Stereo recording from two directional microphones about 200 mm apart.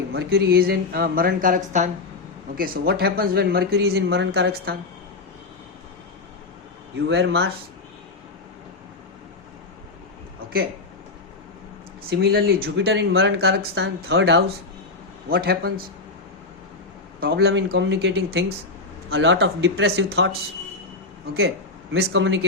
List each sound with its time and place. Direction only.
0.1 s speech: 50° right (ahead or behind)
2.6 s speech: 50° right (ahead or behind)
7.1 s speech: 55° right (ahead or behind)
12.1 s speech: 50° right (ahead or behind)
17.2 s speech: 50° right (ahead or behind); by 20.1 s 70° right (ahead or behind)
20.1 s speech: 55° right (ahead or behind)
21.9 s speech: 65° right (ahead or behind)